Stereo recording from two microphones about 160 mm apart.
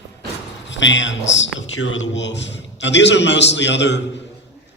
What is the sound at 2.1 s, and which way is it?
A man's voice, 90° left.